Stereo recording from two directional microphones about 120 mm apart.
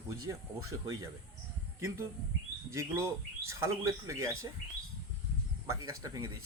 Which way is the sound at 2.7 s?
20° right (ahead or behind).